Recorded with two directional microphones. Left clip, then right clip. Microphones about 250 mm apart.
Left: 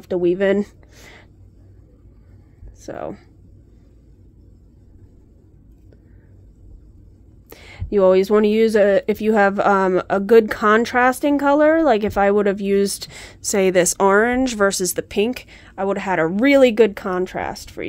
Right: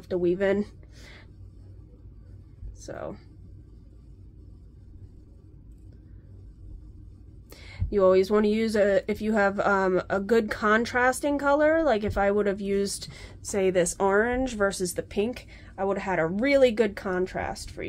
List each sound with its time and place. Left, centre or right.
0.0 s speech: left
2.8 s speech: left
7.4 s speech: left